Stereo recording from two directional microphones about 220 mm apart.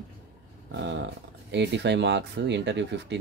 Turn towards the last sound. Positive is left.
turn(degrees=-55)  # may be behind; listen again after turning